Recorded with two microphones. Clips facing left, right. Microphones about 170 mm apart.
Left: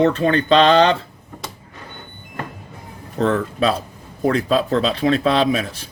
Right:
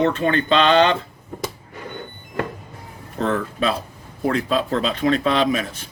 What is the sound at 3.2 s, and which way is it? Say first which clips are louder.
Speech: left 3 dB; 35° left (ahead or behind).